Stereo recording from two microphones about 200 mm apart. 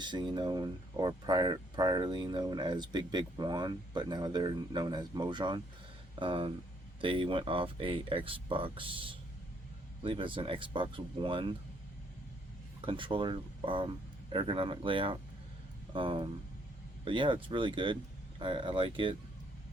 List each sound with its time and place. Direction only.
0.0 s speech: 20° right (ahead or behind)
12.8 s speech: 25° right (ahead or behind)